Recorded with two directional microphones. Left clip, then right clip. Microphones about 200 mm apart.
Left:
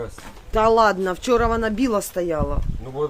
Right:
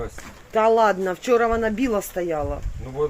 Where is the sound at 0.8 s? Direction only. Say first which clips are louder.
Left 1 dB; 5° left (ahead or behind).